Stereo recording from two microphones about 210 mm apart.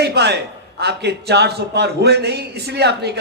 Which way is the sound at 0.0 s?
50° right (ahead or behind).